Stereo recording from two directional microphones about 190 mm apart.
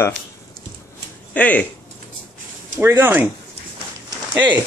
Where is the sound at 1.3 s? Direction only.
10° left (ahead or behind).